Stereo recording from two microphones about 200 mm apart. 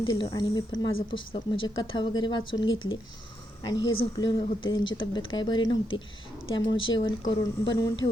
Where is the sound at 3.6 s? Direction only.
20° left (ahead or behind).